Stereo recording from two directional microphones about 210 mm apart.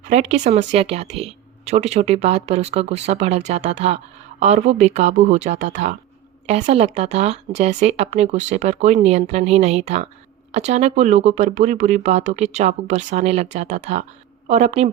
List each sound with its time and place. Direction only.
0.1 s speech: 35° right (ahead or behind)